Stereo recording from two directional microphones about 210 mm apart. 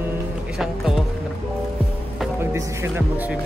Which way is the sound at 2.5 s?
10° right (ahead or behind).